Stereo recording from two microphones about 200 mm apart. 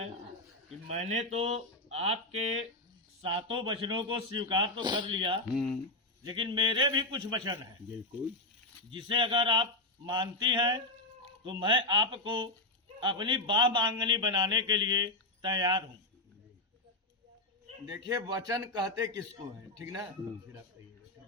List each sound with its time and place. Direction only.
0.9 s a man's voice: 35° right (ahead or behind)
8.9 s a man's voice: 25° right (ahead or behind)
17.8 s a man's voice: 20° right (ahead or behind)